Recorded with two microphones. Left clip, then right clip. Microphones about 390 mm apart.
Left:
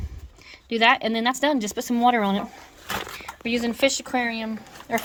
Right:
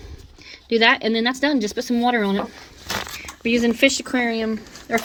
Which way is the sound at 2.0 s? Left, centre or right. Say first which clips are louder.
Left 1 dB; left.